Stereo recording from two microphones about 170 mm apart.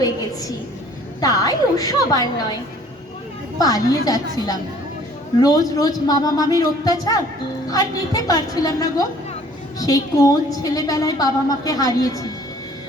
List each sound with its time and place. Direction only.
0.0 s a sound: 20° left (ahead or behind)
1.2 s a woman's voice: 20° left (ahead or behind)
3.6 s a woman's voice: 20° left (ahead or behind)